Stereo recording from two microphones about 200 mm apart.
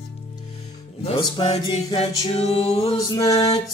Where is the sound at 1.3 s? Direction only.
25° left (ahead or behind).